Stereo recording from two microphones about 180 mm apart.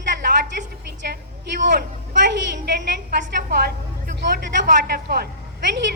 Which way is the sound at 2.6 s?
65° right (ahead or behind).